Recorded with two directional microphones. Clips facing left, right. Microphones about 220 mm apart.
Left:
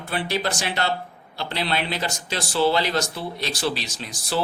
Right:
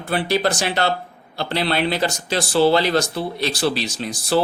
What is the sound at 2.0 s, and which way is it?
Speech, 35° right (ahead or behind).